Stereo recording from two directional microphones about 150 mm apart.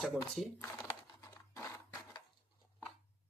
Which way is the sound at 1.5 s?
20° left (ahead or behind).